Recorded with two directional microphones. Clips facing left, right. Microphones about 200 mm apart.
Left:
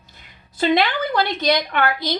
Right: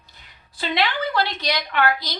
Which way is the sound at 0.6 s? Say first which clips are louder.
Left 5 dB; 50° left (ahead or behind).